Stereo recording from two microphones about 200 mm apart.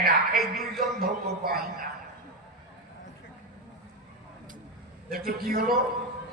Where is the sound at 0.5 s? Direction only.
50° right (ahead or behind).